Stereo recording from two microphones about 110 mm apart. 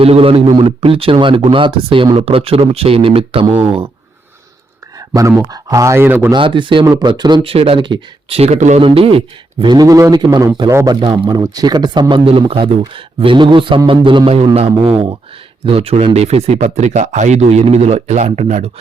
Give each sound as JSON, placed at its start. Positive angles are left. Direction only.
{"t": 0.0, "sound": "a man's voice", "side_deg": -60}
{"t": 2.1, "sound": "speech", "side_deg": -60}
{"t": 4.9, "sound": "speech", "side_deg": -30}
{"t": 6.3, "sound": "a man's voice", "side_deg": -45}
{"t": 7.5, "sound": "speech", "side_deg": -60}
{"t": 8.4, "sound": "speech", "side_deg": -85}
{"t": 8.8, "sound": "speech", "side_deg": -55}
{"t": 9.8, "sound": "speech", "side_deg": -30}
{"t": 10.8, "sound": "a man's voice", "side_deg": -45}
{"t": 11.3, "sound": "speech", "side_deg": -30}
{"t": 12.2, "sound": "a man's voice", "side_deg": -55}
{"t": 14.3, "sound": "a man's voice", "side_deg": -65}